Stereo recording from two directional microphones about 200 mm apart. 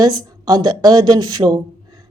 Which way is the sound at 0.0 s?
20° right (ahead or behind).